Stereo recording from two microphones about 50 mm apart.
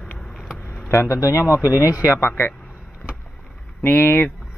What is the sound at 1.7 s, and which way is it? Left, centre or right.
Speech, left.